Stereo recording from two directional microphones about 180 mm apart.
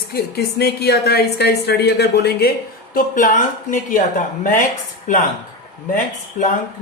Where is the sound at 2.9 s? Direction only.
50° left (ahead or behind).